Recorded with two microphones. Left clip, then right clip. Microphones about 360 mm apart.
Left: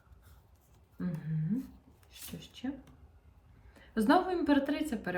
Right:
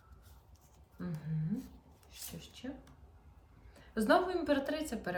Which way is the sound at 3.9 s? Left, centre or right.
Centre.